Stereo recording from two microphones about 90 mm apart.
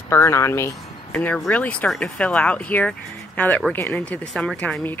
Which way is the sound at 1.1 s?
15° left (ahead or behind).